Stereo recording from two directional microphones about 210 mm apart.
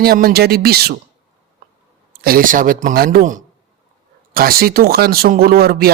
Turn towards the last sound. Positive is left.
turn(degrees=-45)  # may be behind; listen again after turning